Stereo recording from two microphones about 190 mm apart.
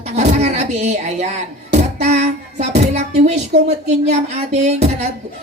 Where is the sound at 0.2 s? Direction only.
35° right (ahead or behind).